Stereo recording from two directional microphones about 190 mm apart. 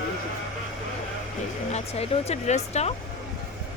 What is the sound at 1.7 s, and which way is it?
Speech, 35° left (ahead or behind).